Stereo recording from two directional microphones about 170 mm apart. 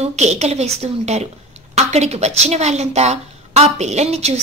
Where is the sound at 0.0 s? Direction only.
40° right (ahead or behind).